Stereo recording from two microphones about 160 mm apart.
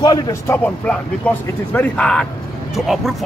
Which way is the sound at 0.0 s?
20° left (ahead or behind).